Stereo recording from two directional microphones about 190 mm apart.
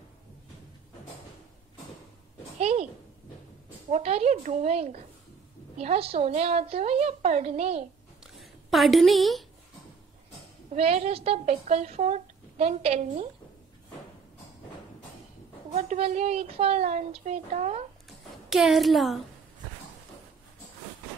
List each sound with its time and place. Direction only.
2.6 s a sound: 35° right (ahead or behind)
3.9 s a woman's voice: 35° right (ahead or behind)
8.4 s a woman's voice: centre (ahead or behind)
10.7 s a woman's voice: 35° right (ahead or behind)
15.7 s a woman's voice: 35° right (ahead or behind)
18.5 s a woman's voice: centre (ahead or behind)